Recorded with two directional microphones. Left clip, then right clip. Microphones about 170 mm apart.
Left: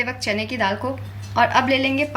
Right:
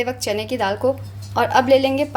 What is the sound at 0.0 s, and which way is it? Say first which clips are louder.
A woman's voice: right 1 dB; 75° right (ahead or behind).